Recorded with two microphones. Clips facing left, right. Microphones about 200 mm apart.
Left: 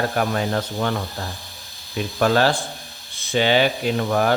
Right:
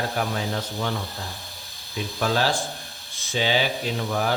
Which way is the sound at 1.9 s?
60° left (ahead or behind).